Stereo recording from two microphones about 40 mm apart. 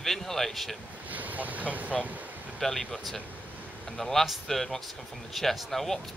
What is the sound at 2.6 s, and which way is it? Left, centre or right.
Speech, centre.